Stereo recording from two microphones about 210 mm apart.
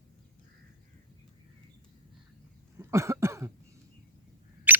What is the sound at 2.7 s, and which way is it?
Cough, 15° right (ahead or behind).